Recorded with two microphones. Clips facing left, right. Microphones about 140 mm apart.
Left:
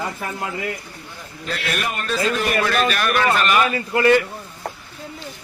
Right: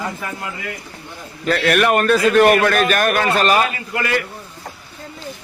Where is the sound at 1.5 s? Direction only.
65° right (ahead or behind); by 3.7 s 35° right (ahead or behind).